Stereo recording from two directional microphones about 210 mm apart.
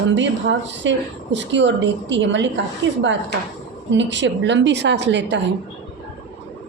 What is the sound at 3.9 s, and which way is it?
A woman's voice, 60° right (ahead or behind).